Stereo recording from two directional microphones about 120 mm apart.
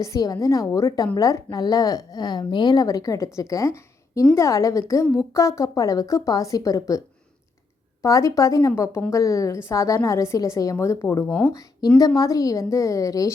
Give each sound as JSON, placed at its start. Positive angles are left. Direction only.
{"t": 0.0, "sound": "a woman's voice", "side_deg": 30}
{"t": 8.0, "sound": "a woman's voice", "side_deg": 25}